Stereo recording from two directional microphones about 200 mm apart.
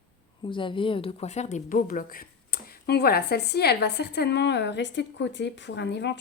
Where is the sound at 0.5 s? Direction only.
25° left (ahead or behind).